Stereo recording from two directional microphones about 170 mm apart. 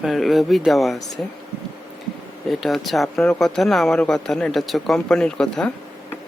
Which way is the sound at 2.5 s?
Centre (ahead or behind).